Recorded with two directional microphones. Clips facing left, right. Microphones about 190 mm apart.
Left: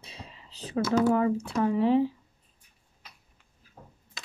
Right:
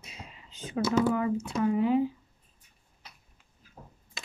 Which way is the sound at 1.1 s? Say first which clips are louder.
Left 3 dB; 35° left (ahead or behind).